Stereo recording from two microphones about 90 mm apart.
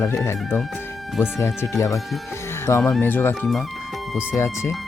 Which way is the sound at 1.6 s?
30° left (ahead or behind).